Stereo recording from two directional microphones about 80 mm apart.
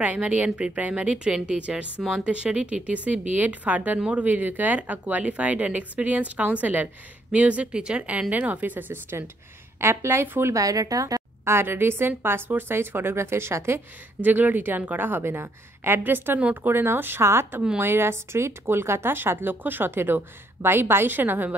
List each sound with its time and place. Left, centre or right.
0.0 s speech: centre
10.5 s speech: right
11.4 s speech: right
14.2 s speech: right